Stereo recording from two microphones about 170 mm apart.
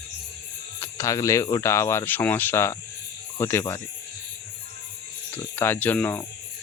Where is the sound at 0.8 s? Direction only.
20° left (ahead or behind).